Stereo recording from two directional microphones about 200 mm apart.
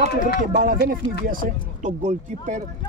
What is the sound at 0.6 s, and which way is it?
Speech, 50° right (ahead or behind).